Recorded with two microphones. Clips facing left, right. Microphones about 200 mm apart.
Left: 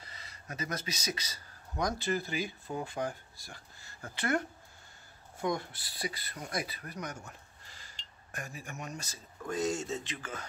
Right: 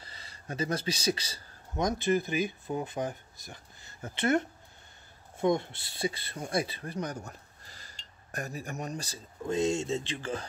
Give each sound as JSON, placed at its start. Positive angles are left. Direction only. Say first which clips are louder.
{"t": 0.0, "sound": "speech", "louder": "right 2 dB", "side_deg": -30}